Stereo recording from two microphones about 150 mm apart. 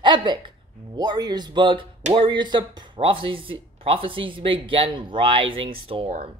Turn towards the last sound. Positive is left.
turn(degrees=-40)  # may be behind; listen again after turning